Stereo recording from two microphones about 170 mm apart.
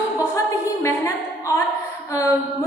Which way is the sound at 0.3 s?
15° left (ahead or behind).